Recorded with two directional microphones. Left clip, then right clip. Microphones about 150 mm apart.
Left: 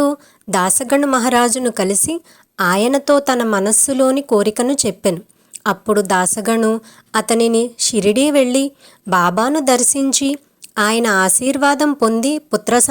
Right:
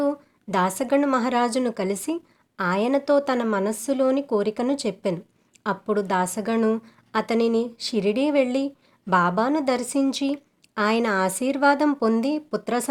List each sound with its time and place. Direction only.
0.0 s a woman's voice: 40° left (ahead or behind)